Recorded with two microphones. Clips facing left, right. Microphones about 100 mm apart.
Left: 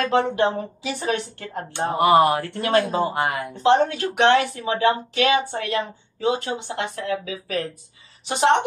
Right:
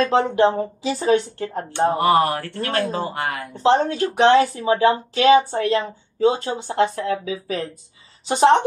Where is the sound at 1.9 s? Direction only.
15° left (ahead or behind).